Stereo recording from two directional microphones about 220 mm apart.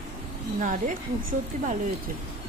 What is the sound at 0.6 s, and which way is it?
A woman's voice, 35° right (ahead or behind).